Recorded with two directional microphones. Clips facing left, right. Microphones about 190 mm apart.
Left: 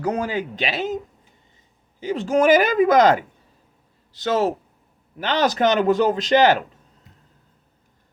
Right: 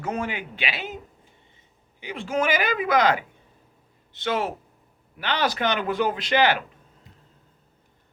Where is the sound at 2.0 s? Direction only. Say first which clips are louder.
Left 7 dB; 45° left (ahead or behind).